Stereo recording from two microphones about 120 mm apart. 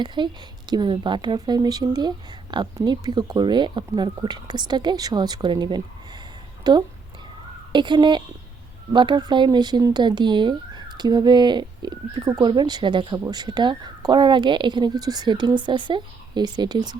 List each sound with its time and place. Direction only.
0.0 s speech: 40° right (ahead or behind)